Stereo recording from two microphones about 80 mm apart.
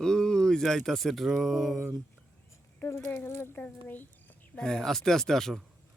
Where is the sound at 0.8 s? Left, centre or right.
Centre.